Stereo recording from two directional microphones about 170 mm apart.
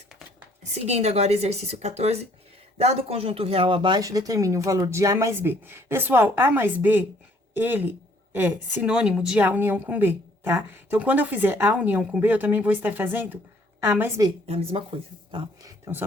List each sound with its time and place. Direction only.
0.6 s a woman's voice: 40° right (ahead or behind); by 14.1 s 10° right (ahead or behind)
14.4 s speech: 35° right (ahead or behind)
15.6 s speech: 10° right (ahead or behind)